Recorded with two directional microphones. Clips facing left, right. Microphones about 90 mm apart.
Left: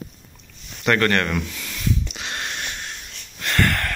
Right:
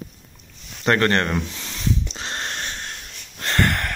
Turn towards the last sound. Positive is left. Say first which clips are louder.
# even
turn(degrees=-20)  # may be behind; listen again after turning